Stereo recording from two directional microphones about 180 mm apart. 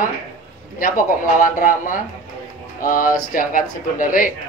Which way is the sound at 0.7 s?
50° left (ahead or behind).